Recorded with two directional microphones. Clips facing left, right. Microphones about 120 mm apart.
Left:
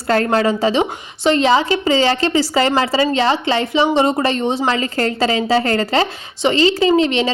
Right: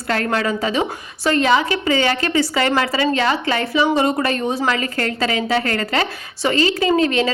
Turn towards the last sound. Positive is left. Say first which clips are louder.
# left 2 dB
turn(degrees=25)  # may be behind; listen again after turning